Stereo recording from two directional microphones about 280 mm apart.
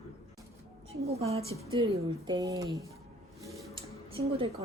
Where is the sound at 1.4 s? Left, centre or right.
Centre.